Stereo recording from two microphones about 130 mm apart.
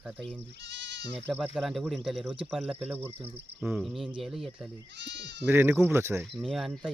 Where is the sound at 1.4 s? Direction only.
Centre (ahead or behind).